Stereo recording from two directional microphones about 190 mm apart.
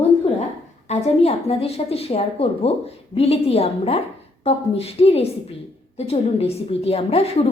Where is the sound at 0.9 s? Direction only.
35° left (ahead or behind).